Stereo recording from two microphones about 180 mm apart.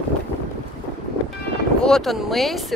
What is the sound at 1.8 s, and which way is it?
Speech, 5° left (ahead or behind).